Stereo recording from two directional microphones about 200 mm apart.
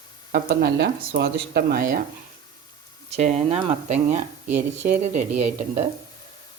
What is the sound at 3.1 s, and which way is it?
Speech, 30° right (ahead or behind).